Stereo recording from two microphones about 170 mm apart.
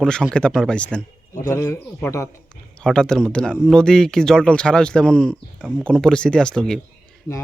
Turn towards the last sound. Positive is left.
turn(degrees=5)  # may be behind; listen again after turning